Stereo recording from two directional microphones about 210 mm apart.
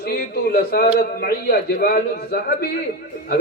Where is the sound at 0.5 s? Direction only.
45° left (ahead or behind).